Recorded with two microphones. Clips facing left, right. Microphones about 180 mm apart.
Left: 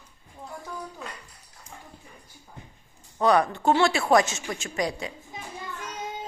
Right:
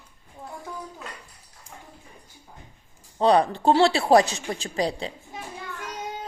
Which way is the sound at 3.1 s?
30° right (ahead or behind).